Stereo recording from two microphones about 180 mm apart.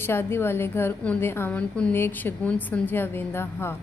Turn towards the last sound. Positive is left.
turn(degrees=15)  # may be behind; listen again after turning